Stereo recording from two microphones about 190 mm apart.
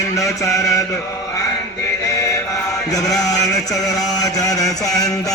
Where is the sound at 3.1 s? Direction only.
20° left (ahead or behind).